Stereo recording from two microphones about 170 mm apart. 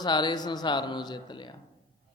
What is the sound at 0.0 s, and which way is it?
Speech, 25° left (ahead or behind).